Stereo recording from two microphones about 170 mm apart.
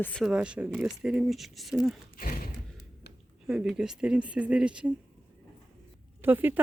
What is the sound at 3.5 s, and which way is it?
Speech, 5° right (ahead or behind).